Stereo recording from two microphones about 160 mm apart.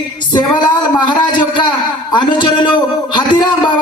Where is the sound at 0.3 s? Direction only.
25° left (ahead or behind).